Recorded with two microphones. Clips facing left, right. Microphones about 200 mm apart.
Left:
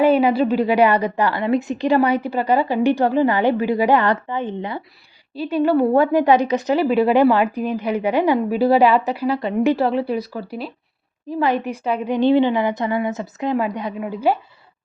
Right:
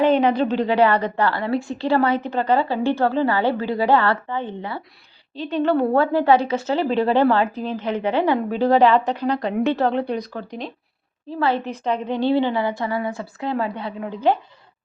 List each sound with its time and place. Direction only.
0.0 s a woman's voice: 10° left (ahead or behind)